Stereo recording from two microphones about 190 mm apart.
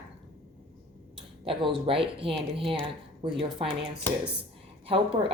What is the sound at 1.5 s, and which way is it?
Speech, 30° right (ahead or behind).